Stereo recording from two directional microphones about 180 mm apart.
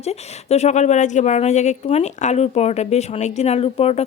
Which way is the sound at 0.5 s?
40° left (ahead or behind).